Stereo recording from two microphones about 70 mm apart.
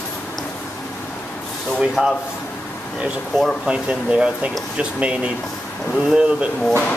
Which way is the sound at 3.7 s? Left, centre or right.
Centre.